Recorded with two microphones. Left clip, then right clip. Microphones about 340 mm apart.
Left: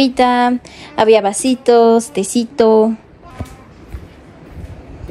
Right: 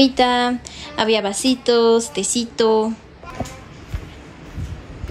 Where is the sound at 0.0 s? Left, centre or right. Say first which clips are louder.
Left 3 dB; centre.